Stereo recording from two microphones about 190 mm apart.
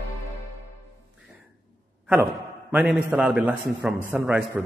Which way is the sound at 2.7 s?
5° right (ahead or behind).